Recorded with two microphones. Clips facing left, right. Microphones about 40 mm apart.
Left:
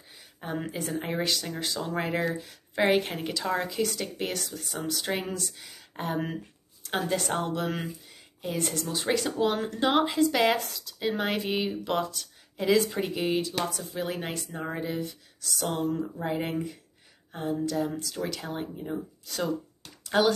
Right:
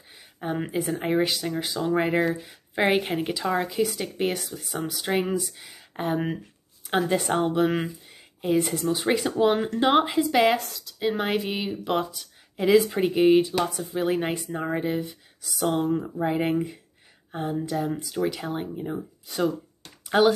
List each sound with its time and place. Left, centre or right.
0.4 s speech: centre
4.7 s speech: centre